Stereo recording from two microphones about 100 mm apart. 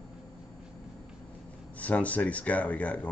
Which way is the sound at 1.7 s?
15° left (ahead or behind).